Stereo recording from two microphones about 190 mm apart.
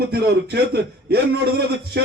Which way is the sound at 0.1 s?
55° right (ahead or behind).